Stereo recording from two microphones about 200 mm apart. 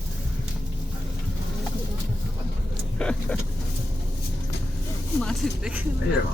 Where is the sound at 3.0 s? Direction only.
5° left (ahead or behind).